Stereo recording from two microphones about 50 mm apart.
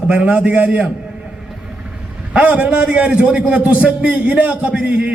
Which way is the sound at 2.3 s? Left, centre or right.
Right.